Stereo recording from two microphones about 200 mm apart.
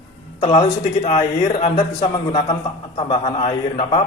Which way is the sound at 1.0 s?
30° left (ahead or behind).